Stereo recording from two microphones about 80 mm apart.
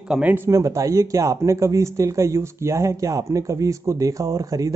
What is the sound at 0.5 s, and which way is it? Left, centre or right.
Speech, right.